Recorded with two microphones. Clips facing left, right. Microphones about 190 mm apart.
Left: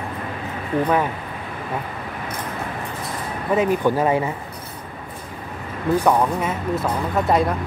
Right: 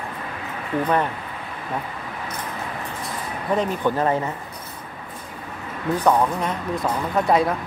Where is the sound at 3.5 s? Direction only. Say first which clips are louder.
Left 4 dB; 10° left (ahead or behind).